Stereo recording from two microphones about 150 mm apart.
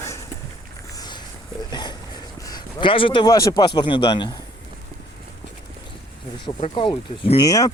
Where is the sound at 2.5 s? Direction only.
30° left (ahead or behind).